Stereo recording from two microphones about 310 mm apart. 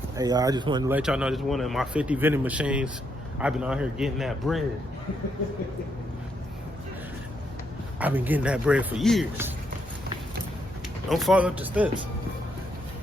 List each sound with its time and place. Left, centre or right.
0.2 s speech: centre
7.9 s speech: centre
11.1 s speech: centre